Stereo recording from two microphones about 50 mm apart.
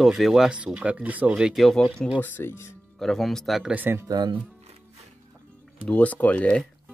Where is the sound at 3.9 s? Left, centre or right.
Right.